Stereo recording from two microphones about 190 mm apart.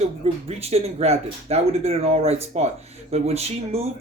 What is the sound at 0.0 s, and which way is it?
Speech, 35° right (ahead or behind).